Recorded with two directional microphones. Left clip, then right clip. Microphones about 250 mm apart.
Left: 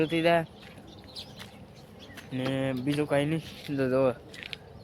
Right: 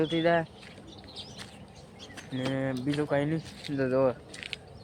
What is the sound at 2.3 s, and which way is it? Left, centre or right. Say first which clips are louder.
Speech: left 1 dB; centre.